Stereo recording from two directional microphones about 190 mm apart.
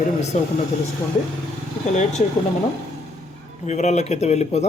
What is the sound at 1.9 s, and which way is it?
Speech, 40° left (ahead or behind).